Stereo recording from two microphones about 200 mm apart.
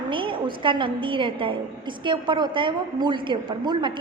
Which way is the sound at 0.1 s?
25° right (ahead or behind).